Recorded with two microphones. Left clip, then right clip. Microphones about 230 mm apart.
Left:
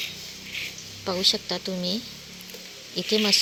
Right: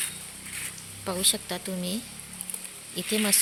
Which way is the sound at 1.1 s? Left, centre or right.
Centre.